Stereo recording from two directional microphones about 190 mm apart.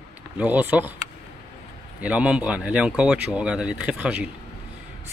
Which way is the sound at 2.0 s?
5° right (ahead or behind).